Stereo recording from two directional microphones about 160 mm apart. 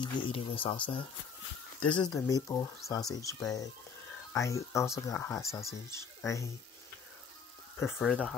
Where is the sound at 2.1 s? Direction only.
20° left (ahead or behind).